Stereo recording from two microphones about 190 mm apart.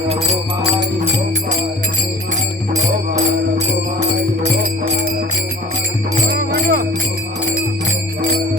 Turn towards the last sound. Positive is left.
turn(degrees=-60)  # may be behind; listen again after turning